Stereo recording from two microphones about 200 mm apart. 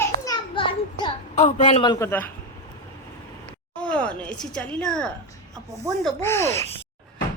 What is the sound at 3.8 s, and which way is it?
A woman's voice, 5° left (ahead or behind).